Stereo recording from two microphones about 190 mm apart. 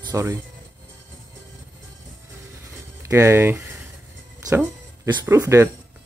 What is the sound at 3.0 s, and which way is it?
Speech, 15° right (ahead or behind).